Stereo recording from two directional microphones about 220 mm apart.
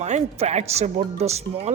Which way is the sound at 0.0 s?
30° right (ahead or behind).